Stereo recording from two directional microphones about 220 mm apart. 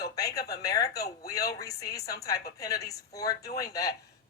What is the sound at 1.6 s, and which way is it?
Speech, 15° left (ahead or behind).